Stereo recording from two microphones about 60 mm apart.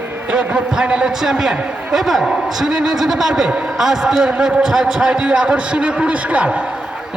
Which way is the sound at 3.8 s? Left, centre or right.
Centre.